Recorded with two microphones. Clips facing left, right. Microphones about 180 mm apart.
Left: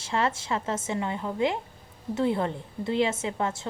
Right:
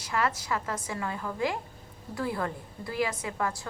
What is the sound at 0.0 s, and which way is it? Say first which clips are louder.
A woman's voice: left 2 dB; 25° left (ahead or behind).